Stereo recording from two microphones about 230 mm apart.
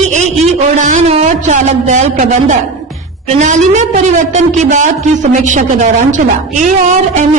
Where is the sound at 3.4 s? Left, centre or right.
Right.